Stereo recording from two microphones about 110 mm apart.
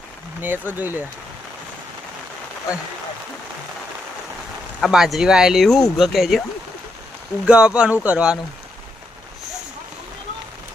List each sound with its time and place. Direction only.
0.4 s speech: 15° right (ahead or behind)
4.8 s speech: centre (ahead or behind)
7.4 s speech: 10° right (ahead or behind)